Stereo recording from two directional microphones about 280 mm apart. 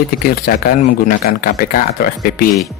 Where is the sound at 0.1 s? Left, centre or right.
Left.